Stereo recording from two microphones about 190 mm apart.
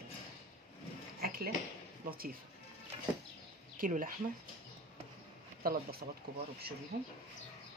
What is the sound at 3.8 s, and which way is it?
Speech, 45° right (ahead or behind).